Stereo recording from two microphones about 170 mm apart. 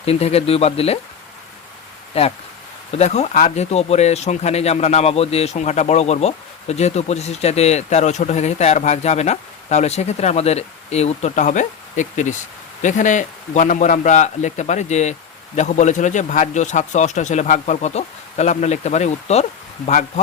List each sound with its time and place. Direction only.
0.0 s speech: 35° left (ahead or behind)
2.1 s a man's voice: 35° left (ahead or behind)